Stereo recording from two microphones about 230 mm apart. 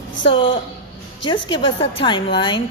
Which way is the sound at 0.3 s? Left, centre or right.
Left.